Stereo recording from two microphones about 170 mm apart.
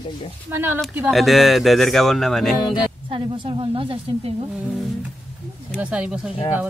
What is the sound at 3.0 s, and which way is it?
A woman's voice, 30° right (ahead or behind).